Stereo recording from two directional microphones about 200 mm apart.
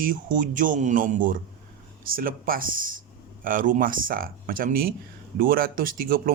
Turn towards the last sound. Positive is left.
turn(degrees=-45)  # may be behind; listen again after turning